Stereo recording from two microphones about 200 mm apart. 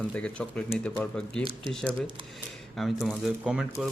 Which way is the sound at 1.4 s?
25° right (ahead or behind).